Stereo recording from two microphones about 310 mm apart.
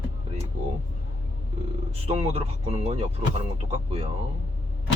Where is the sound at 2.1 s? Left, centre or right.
Centre.